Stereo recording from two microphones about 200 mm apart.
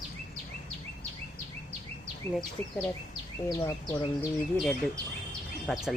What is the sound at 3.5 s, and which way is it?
Speech, 20° left (ahead or behind).